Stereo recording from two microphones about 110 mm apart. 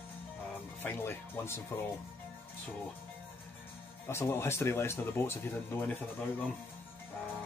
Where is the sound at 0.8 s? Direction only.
20° left (ahead or behind).